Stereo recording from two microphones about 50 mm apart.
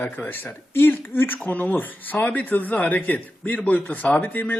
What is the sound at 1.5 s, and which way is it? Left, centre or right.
Speech, left.